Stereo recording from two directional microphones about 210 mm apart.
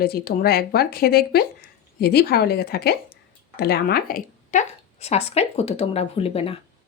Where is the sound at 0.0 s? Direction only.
45° left (ahead or behind); by 6.6 s 30° left (ahead or behind).